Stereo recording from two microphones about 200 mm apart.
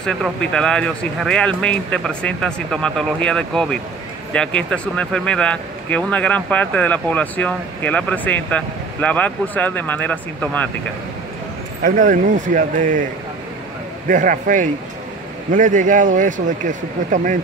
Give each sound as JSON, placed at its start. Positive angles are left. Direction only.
{"t": 0.0, "sound": "speech", "side_deg": 5}
{"t": 11.8, "sound": "speech", "side_deg": -40}
{"t": 14.0, "sound": "speech", "side_deg": -40}